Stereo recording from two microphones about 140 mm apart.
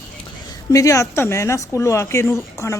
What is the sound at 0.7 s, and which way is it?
Speech, 25° left (ahead or behind).